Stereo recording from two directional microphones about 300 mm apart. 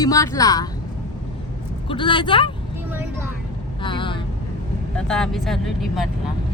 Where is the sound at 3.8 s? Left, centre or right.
Centre.